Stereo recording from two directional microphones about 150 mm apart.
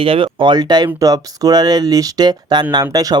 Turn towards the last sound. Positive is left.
turn(degrees=-25)  # may be behind; listen again after turning